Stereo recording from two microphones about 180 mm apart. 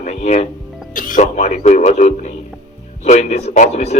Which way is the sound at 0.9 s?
45° left (ahead or behind).